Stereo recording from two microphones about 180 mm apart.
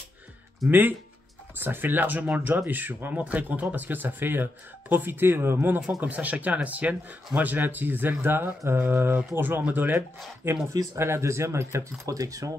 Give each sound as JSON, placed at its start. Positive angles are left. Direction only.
{"t": 0.7, "sound": "speech", "side_deg": -10}